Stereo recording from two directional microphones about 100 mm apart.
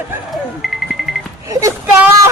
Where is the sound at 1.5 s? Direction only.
30° right (ahead or behind).